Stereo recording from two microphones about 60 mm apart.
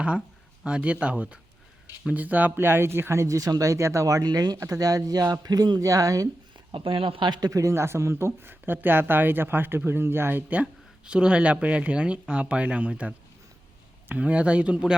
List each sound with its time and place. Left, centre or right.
0.6 s speech: centre; by 6.2 s right
7.4 s speech: right
7.7 s speech: right
10.5 s speech: centre